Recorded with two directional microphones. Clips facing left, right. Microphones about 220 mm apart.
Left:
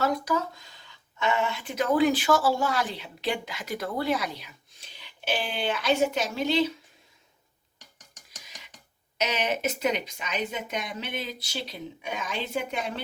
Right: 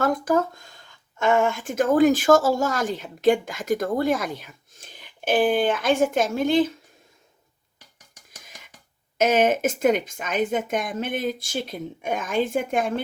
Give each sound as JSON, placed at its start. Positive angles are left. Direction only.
{"t": 0.0, "sound": "speech", "side_deg": -50}
{"t": 8.4, "sound": "a sound", "side_deg": -50}
{"t": 9.1, "sound": "speech", "side_deg": -50}